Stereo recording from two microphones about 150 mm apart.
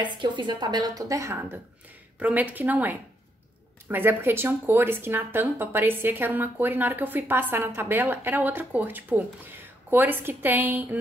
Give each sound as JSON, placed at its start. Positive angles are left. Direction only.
{"t": 0.0, "sound": "a woman's voice", "side_deg": -30}